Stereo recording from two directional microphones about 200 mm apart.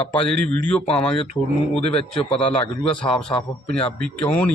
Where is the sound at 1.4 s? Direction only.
10° left (ahead or behind).